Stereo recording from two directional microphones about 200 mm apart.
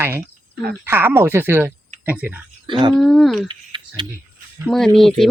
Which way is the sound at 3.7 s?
25° right (ahead or behind).